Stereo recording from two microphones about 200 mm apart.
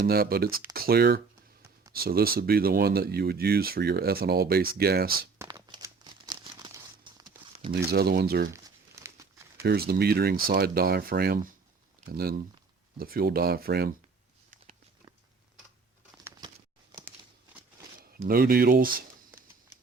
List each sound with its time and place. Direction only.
0.0 s speech: 50° right (ahead or behind)
5.4 s crumpling: 20° right (ahead or behind)
7.9 s speech: 50° right (ahead or behind)
8.5 s crumpling: 15° right (ahead or behind)
9.6 s speech: 50° right (ahead or behind)
18.2 s speech: 45° right (ahead or behind)